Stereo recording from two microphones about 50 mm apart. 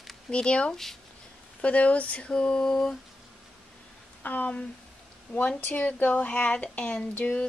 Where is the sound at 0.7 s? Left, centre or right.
Centre.